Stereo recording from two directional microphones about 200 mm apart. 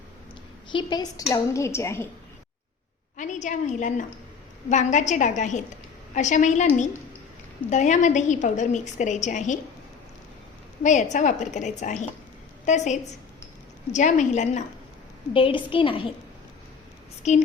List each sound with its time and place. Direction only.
0.7 s a woman's voice: 25° left (ahead or behind)
3.2 s a woman's voice: 35° left (ahead or behind)
7.7 s a woman's voice: 35° left (ahead or behind)
10.8 s a woman's voice: 35° left (ahead or behind)
17.2 s a woman's voice: 35° left (ahead or behind)